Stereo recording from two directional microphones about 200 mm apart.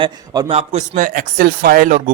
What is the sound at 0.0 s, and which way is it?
Speech, 25° right (ahead or behind).